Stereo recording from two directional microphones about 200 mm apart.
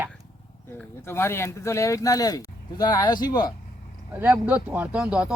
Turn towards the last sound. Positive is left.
turn(degrees=-5)  # may be behind; listen again after turning